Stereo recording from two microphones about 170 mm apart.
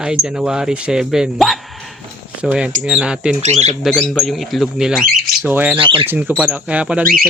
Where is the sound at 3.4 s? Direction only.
40° right (ahead or behind).